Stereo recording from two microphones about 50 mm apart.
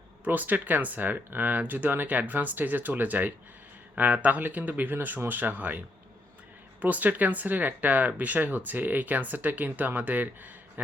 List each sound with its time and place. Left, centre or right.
0.3 s speech: right
6.8 s speech: right